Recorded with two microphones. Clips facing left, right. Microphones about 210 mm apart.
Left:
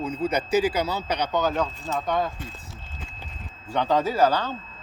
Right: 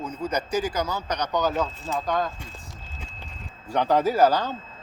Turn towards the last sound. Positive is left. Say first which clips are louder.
# right 2 dB
turn(degrees=-10)  # may be behind; listen again after turning